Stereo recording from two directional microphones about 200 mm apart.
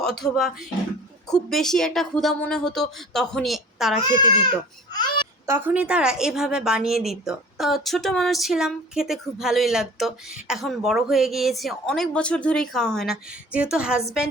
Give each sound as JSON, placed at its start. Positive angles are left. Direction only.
{"t": 0.0, "sound": "a woman's voice", "side_deg": 0}
{"t": 4.9, "sound": "a sound", "side_deg": 20}
{"t": 5.5, "sound": "a woman's voice", "side_deg": -10}